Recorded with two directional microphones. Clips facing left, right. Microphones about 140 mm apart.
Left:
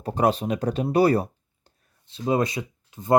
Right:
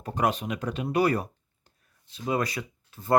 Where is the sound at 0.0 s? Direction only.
30° left (ahead or behind).